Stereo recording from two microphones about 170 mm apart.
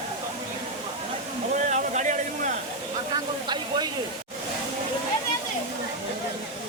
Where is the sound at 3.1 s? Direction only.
25° right (ahead or behind).